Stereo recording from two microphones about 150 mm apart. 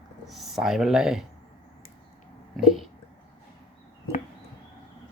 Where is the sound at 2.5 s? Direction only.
Centre (ahead or behind).